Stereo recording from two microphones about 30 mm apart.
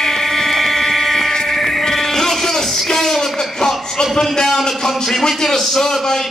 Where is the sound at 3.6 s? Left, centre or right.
Centre.